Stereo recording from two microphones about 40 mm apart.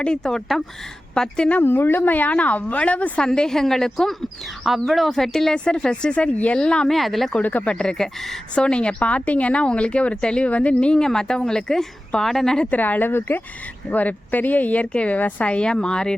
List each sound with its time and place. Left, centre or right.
0.0 s a woman's voice: centre
1.6 s speech: left
3.2 s a woman's voice: centre
4.6 s speech: centre
5.1 s a woman's voice: centre; by 6.6 s left
6.6 s speech: left
6.8 s speech: centre
7.4 s speech: left
7.8 s a woman's voice: centre
8.5 s a woman's voice: left; by 12.5 s centre
12.7 s a woman's voice: left
13.9 s speech: left; by 16.1 s centre